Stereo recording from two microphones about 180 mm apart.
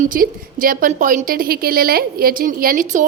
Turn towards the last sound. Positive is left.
turn(degrees=-50)  # may be behind; listen again after turning